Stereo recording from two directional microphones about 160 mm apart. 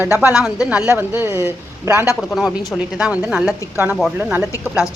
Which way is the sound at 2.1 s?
Centre (ahead or behind).